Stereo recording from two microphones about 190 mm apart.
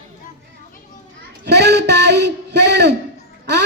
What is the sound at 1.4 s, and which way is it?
Child singing, 60° right (ahead or behind).